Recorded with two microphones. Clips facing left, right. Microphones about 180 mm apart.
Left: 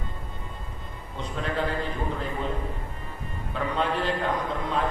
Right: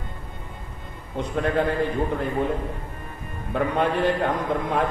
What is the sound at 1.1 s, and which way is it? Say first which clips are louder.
Speech: right 7 dB; 55° right (ahead or behind).